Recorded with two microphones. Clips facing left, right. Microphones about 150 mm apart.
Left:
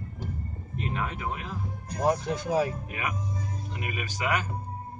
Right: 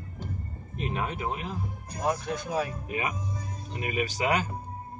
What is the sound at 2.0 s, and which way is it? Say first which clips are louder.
Speech: left 3 dB; 30° left (ahead or behind).